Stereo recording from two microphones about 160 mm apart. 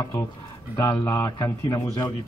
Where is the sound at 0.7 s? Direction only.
20° left (ahead or behind).